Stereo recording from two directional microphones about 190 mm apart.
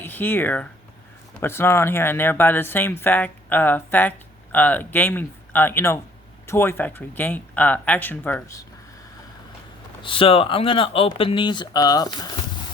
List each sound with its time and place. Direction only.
0.0 s speech: 10° left (ahead or behind)
10.0 s speech: 25° left (ahead or behind)